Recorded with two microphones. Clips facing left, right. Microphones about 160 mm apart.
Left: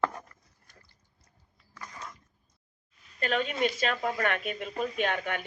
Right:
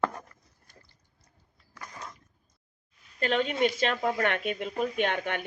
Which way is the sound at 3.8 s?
25° right (ahead or behind).